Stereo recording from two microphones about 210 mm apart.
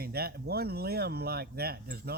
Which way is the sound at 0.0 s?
50° right (ahead or behind).